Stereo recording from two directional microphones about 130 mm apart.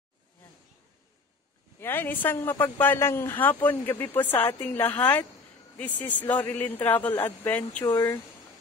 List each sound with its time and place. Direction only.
1.8 s a woman's voice: 15° left (ahead or behind)
7.8 s speech: 30° left (ahead or behind)